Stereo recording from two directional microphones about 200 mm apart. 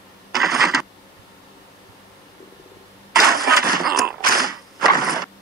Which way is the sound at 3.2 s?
50° right (ahead or behind).